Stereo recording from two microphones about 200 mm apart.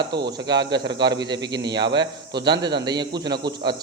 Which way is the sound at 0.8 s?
60° right (ahead or behind).